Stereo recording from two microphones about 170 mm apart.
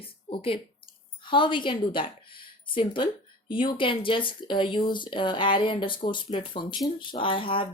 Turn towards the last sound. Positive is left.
turn(degrees=30)  # may be behind; listen again after turning